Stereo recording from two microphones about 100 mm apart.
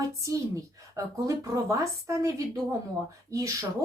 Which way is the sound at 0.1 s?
30° right (ahead or behind).